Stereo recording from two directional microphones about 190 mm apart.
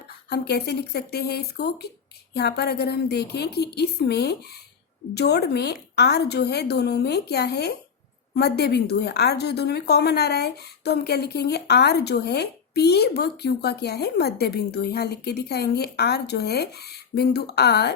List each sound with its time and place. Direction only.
0.3 s a woman's voice: 60° left (ahead or behind)